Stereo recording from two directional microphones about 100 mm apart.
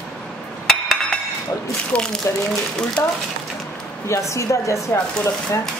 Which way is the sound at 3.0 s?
25° left (ahead or behind).